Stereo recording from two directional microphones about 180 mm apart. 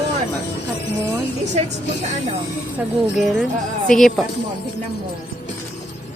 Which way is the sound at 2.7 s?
Centre (ahead or behind).